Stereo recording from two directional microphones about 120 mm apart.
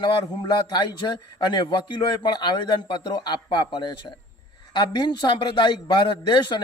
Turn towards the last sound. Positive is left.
turn(degrees=40)  # may be behind; listen again after turning